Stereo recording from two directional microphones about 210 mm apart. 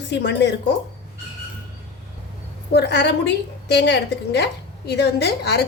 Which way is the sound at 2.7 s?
55° left (ahead or behind).